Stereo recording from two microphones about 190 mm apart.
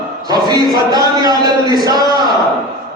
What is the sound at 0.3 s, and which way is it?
A man's voice, 20° right (ahead or behind).